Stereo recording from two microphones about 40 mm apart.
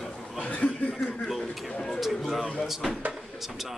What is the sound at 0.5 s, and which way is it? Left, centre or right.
Chuckle, left.